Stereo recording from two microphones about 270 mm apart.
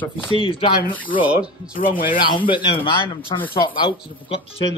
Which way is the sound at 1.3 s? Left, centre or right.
Centre.